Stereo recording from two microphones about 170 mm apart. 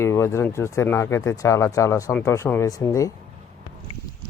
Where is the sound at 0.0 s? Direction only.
15° left (ahead or behind).